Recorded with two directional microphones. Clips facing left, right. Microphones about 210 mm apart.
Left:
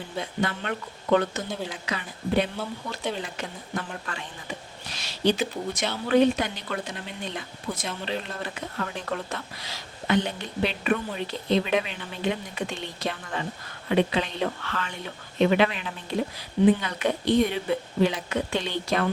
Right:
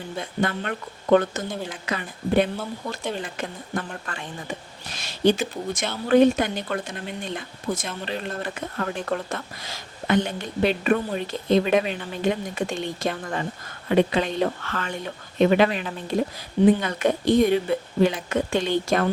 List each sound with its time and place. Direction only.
0.2 s speech: 50° right (ahead or behind)